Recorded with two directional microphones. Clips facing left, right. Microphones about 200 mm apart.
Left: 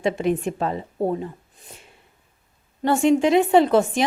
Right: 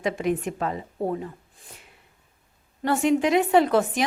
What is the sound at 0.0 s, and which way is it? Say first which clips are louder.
A woman's voice: left 3 dB; 30° left (ahead or behind).